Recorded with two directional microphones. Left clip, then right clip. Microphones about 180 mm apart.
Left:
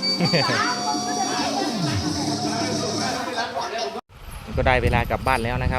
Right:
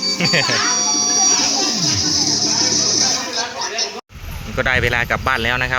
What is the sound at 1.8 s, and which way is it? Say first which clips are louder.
Music: right 8 dB; 70° left (ahead or behind).